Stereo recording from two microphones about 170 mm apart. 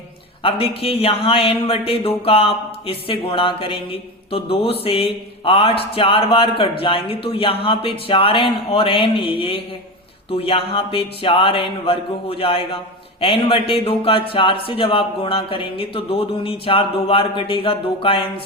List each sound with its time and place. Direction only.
0.8 s speech: 35° left (ahead or behind)